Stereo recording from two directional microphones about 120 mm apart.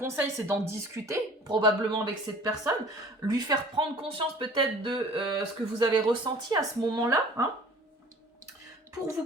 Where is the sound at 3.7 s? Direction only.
45° right (ahead or behind).